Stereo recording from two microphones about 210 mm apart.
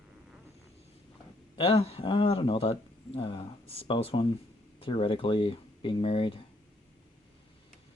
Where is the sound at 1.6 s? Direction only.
25° left (ahead or behind).